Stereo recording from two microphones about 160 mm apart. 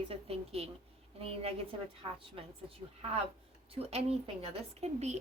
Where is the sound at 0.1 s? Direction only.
40° right (ahead or behind).